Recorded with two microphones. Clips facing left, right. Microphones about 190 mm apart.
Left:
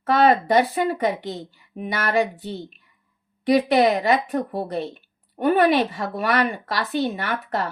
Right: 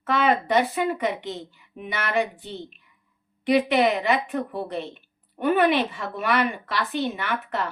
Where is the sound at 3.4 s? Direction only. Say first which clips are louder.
Left 3 dB; 40° left (ahead or behind).